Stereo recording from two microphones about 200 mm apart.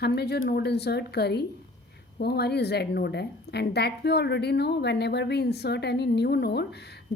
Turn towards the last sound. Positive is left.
turn(degrees=55)  # may be behind; listen again after turning